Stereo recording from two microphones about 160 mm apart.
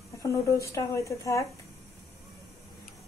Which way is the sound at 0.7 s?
20° left (ahead or behind).